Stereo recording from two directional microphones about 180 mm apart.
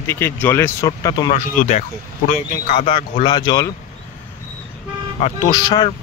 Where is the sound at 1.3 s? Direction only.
40° left (ahead or behind).